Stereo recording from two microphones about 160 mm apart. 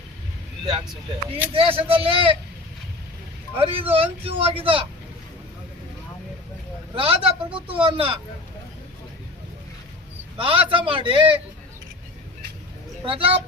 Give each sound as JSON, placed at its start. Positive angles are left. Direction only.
{"t": 1.5, "sound": "speech", "side_deg": -35}
{"t": 3.6, "sound": "speech", "side_deg": -35}
{"t": 6.9, "sound": "speech", "side_deg": -35}
{"t": 10.3, "sound": "speech", "side_deg": -30}
{"t": 13.1, "sound": "speech", "side_deg": -35}